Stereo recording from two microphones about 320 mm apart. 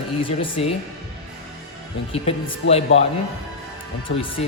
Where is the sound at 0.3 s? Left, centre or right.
Centre.